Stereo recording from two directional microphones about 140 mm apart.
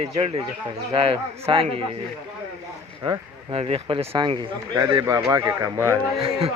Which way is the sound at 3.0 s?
30° right (ahead or behind).